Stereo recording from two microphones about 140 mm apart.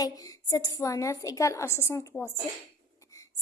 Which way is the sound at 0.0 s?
25° left (ahead or behind).